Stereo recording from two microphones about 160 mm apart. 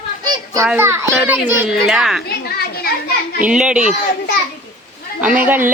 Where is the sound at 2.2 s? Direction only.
80° left.